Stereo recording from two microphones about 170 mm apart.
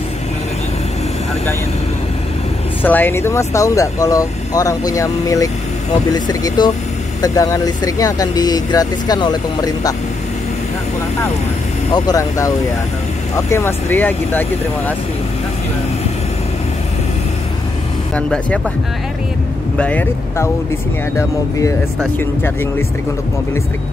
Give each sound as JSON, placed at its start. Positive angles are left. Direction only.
{"t": 2.8, "sound": "speech", "side_deg": 10}
{"t": 11.9, "sound": "speech", "side_deg": 20}
{"t": 18.1, "sound": "speech", "side_deg": 5}
{"t": 19.8, "sound": "speech", "side_deg": 10}
{"t": 22.2, "sound": "speech", "side_deg": 15}